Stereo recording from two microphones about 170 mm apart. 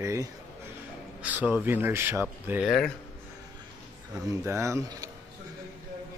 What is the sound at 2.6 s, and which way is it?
Speech, 5° left (ahead or behind).